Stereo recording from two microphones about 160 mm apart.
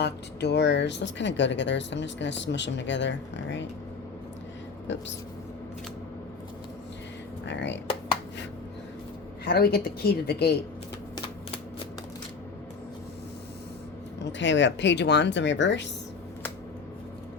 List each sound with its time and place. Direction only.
0.0 s speech: 90° left
4.9 s speech: 90° left
7.4 s speech: 90° left
9.5 s speech: 80° left
14.8 s speech: 90° left